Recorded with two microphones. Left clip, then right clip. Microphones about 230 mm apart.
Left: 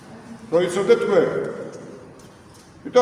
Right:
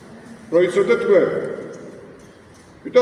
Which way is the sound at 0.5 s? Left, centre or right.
Centre.